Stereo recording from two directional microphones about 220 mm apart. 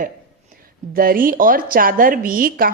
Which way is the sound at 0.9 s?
40° right (ahead or behind).